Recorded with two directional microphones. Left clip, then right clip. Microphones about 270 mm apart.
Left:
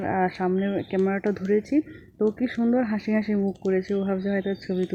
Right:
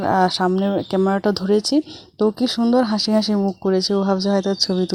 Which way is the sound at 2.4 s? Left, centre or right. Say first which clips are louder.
Right 7 dB; centre.